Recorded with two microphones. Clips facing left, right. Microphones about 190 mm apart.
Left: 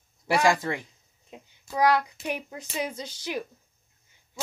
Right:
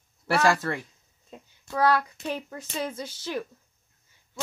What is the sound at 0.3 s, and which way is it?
A child's voice, 15° left (ahead or behind).